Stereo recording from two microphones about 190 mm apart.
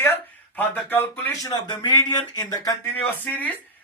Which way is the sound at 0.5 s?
10° left (ahead or behind).